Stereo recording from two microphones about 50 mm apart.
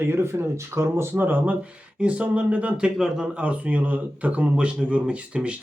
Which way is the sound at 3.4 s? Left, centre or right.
Right.